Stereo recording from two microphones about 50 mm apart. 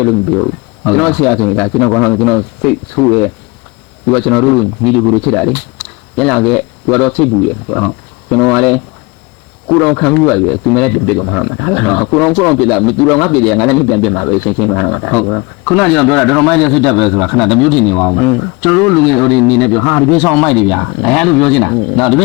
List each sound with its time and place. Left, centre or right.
0.9 s speech: centre